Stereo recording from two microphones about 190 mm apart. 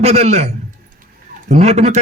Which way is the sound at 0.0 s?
35° right (ahead or behind).